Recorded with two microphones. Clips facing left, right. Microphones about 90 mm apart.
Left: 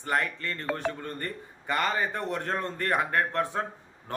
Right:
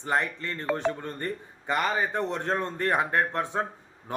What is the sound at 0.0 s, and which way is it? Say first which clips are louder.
Speech: right 1 dB; 20° right (ahead or behind).